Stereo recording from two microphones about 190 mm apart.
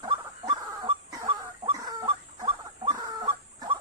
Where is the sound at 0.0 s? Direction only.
25° right (ahead or behind).